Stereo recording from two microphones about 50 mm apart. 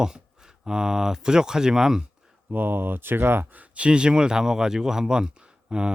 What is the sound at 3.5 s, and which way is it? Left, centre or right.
Speech, right.